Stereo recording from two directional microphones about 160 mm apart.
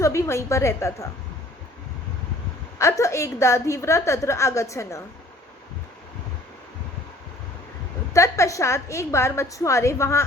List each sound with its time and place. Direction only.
0.0 s a woman's voice: 15° left (ahead or behind)
2.7 s a woman's voice: 20° left (ahead or behind)
8.1 s a woman's voice: 20° left (ahead or behind)